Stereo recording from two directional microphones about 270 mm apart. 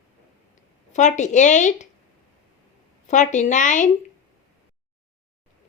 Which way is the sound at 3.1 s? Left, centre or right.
Left.